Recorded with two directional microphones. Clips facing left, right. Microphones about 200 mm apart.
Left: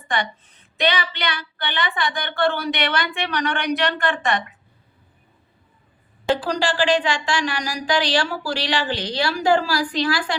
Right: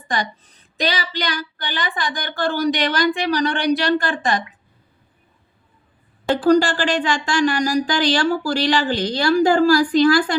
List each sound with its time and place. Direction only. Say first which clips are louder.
0.1 s a woman's voice: right 1 dB; 35° right (ahead or behind)
6.3 s speech: right 7 dB; 45° right (ahead or behind)